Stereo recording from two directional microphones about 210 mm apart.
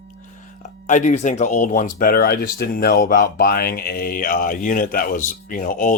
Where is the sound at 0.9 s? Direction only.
35° left (ahead or behind).